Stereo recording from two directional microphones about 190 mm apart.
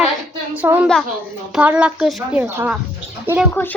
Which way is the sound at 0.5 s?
10° right (ahead or behind).